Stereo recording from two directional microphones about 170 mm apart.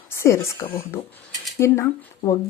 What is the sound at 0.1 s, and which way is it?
Speech, 15° left (ahead or behind).